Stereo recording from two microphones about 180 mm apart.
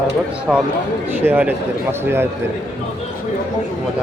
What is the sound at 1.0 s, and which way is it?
A man's voice, 10° right (ahead or behind).